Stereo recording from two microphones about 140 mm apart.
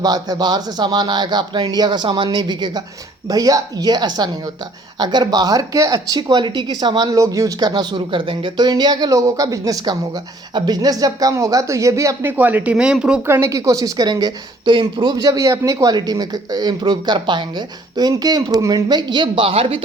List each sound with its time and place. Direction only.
0.0 s speech: 30° right (ahead or behind)
12.4 s speech: 10° right (ahead or behind)
13.2 s speech: 20° right (ahead or behind); by 19.8 s 40° right (ahead or behind)